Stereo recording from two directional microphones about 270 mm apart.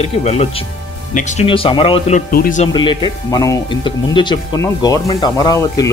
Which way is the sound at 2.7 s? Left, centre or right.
Centre.